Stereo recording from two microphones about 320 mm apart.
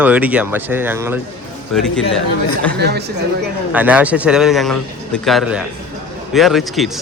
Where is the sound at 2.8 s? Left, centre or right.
Right.